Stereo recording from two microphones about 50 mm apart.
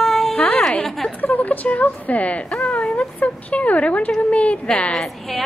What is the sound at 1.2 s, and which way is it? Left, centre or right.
A woman's voice, left.